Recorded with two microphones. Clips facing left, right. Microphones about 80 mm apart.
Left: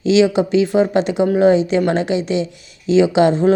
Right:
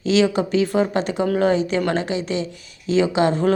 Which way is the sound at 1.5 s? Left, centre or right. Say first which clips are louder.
Left 5 dB; left.